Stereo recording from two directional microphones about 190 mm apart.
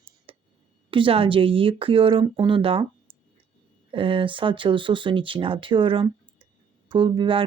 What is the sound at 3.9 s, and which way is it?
Speech, 25° right (ahead or behind).